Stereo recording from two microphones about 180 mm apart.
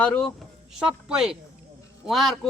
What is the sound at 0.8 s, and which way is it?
A man's voice, 5° right (ahead or behind).